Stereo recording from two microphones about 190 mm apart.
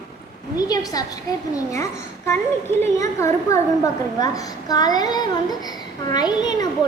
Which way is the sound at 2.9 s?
15° left (ahead or behind).